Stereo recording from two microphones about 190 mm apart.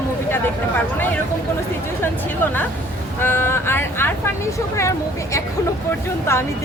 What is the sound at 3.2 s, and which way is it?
Speech, 10° left (ahead or behind).